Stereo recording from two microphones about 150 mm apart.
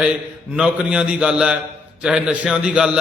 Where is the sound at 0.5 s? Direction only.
5° right (ahead or behind).